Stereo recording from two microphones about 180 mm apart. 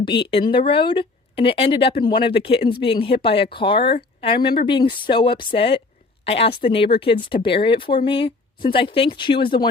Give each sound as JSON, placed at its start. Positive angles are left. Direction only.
{"t": 0.3, "sound": "speech", "side_deg": 30}